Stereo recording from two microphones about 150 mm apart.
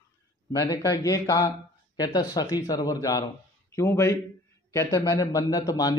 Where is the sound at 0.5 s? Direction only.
20° left (ahead or behind).